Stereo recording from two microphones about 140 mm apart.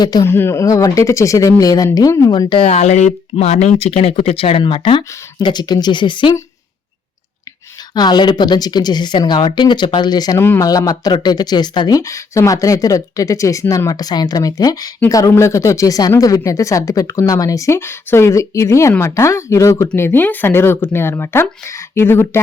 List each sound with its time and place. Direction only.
0.0 s speech: 30° left (ahead or behind)
0.3 s speech: 15° left (ahead or behind)
2.5 s speech: 45° left (ahead or behind)
7.9 s speech: 30° left (ahead or behind)
10.3 s speech: 15° left (ahead or behind)
10.7 s speech: 25° left (ahead or behind)